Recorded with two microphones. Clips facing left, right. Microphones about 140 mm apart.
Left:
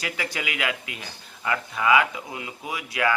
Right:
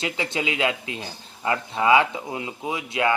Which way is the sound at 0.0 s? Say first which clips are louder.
Right 4 dB; 25° right (ahead or behind).